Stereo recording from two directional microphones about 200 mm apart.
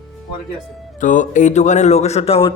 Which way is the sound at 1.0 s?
40° left (ahead or behind).